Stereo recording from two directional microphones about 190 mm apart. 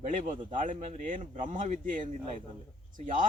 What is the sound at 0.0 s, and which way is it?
A man's voice, 40° right (ahead or behind).